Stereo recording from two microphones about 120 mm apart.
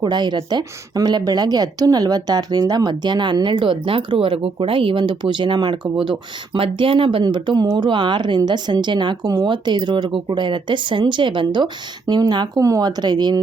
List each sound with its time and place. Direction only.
0.0 s a woman's voice: 35° right (ahead or behind)